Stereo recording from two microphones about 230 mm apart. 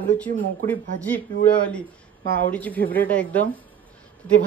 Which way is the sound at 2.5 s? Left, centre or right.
Centre.